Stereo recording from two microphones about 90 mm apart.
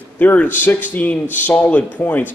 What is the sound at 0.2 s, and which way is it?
Speech, 20° left (ahead or behind).